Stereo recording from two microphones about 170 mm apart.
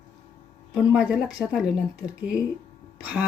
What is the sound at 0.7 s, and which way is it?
Speech, 5° right (ahead or behind).